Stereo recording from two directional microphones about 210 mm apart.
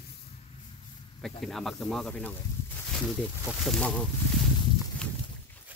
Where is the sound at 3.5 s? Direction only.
Centre (ahead or behind).